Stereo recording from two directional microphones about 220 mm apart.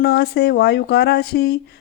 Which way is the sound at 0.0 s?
45° left (ahead or behind).